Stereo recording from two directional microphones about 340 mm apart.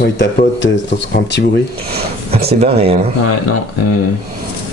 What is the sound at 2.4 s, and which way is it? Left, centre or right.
Speech, right.